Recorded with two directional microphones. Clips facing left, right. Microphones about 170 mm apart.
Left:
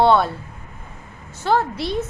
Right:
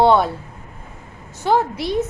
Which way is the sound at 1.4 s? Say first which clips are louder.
Right 2 dB; 15° right (ahead or behind).